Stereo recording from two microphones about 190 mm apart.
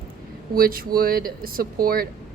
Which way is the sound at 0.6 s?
50° right (ahead or behind).